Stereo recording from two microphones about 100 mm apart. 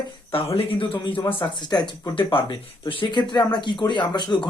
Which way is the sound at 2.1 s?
60° left (ahead or behind).